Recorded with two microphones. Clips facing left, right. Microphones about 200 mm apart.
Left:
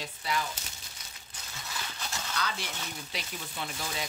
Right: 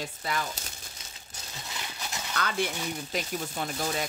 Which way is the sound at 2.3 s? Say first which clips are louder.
Right 7 dB; 55° right (ahead or behind).